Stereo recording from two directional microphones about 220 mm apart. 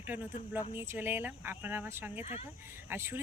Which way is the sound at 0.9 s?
10° right (ahead or behind).